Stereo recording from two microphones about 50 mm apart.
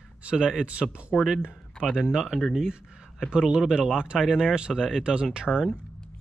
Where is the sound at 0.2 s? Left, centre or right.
Right.